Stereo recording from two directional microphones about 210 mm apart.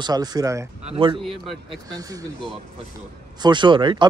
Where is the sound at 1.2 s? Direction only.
Centre (ahead or behind).